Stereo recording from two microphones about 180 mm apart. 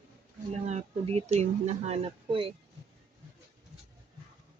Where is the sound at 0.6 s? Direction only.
40° right (ahead or behind).